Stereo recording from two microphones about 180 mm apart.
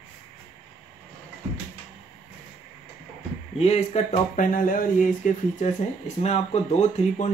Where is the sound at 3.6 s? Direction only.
35° left (ahead or behind).